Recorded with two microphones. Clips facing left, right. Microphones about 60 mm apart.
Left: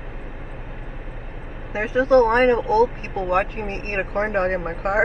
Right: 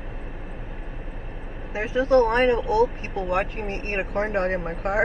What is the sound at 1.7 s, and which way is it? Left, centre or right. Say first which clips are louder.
Speech: left 3 dB; left.